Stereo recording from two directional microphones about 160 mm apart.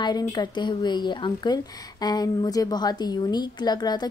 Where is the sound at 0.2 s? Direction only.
25° left (ahead or behind).